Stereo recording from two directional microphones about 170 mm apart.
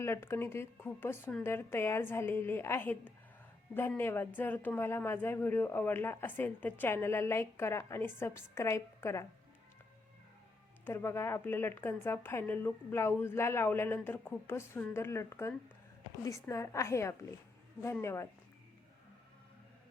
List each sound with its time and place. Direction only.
0.0 s speech: 15° left (ahead or behind)
10.8 s speech: 15° left (ahead or behind)